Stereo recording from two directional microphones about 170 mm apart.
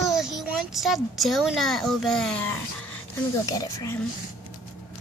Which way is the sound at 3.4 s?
20° left (ahead or behind).